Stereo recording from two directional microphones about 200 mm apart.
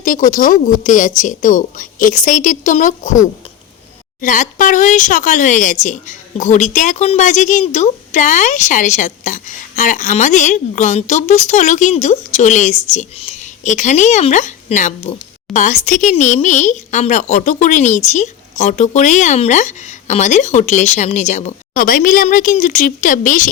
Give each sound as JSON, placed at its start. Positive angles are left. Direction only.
{"t": 0.0, "sound": "speech", "side_deg": 40}